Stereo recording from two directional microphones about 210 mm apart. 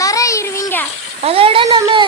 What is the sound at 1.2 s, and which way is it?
Speech, 25° right (ahead or behind).